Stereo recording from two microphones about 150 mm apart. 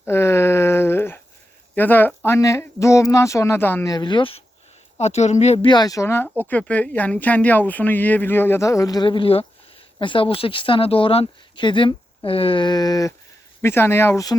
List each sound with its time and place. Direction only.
0.0 s a sound: 15° left (ahead or behind)
1.7 s speech: 10° left (ahead or behind)
3.9 s speech: 30° left (ahead or behind)
4.9 s a woman's voice: 45° left (ahead or behind)
5.6 s speech: 25° left (ahead or behind)